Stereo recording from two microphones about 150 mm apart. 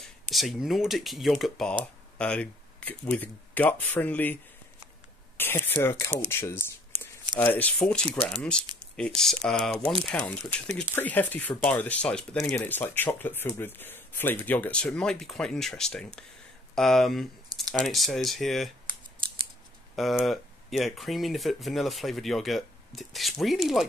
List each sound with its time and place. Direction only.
0.0 s speech: centre (ahead or behind)
5.4 s speech: 15° left (ahead or behind)
20.0 s speech: centre (ahead or behind)